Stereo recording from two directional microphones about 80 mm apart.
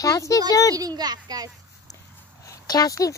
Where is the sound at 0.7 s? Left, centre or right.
Right.